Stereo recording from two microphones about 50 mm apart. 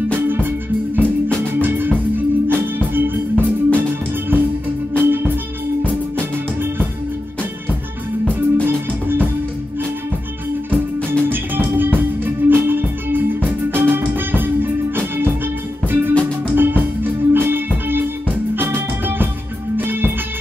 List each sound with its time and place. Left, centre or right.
0.3 s music: right
5.0 s music: right
8.6 s music: right
11.2 s music: right